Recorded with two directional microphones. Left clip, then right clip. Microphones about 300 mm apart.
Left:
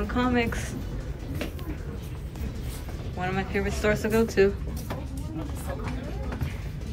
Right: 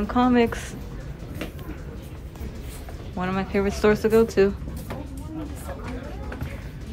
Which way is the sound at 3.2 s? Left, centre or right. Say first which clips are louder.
Right 4 dB; centre.